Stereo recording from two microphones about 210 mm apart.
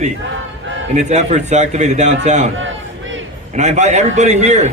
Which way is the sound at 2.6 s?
65° right (ahead or behind).